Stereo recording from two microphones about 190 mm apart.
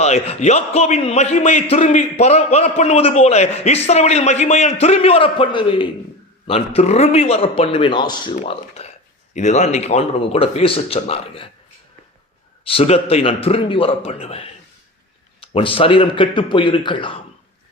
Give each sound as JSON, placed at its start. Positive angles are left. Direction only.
{"t": 0.0, "sound": "a man's voice", "side_deg": 35}
{"t": 8.4, "sound": "a man's voice", "side_deg": 35}
{"t": 12.6, "sound": "a man's voice", "side_deg": 30}